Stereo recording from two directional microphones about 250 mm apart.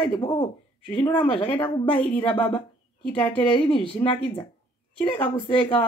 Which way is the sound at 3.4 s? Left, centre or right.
Left.